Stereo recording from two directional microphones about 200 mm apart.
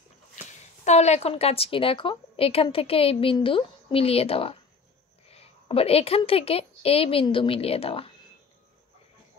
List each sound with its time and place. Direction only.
0.5 s speech: 35° left (ahead or behind)